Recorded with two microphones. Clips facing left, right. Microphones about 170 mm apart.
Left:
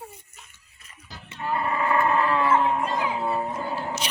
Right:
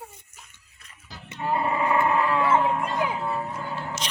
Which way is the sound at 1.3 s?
20° right (ahead or behind).